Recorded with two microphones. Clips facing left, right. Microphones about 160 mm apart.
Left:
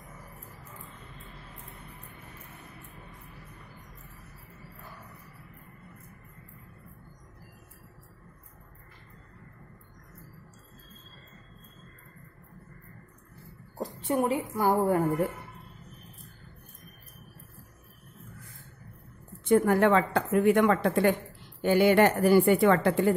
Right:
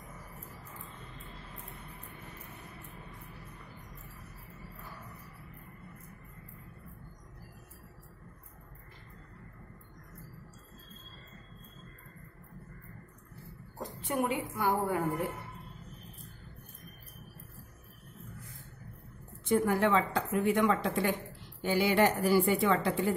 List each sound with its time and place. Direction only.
13.7 s speech: 30° left (ahead or behind)
19.4 s speech: 55° left (ahead or behind)